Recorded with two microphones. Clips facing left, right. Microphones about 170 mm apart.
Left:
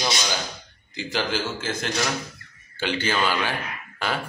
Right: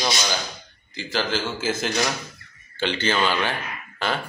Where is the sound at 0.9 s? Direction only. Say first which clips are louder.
Right 1 dB; 15° left (ahead or behind).